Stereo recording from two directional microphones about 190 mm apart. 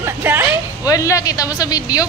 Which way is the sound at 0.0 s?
10° right (ahead or behind).